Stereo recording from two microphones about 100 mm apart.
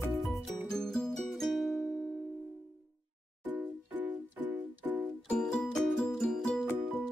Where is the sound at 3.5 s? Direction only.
15° right (ahead or behind).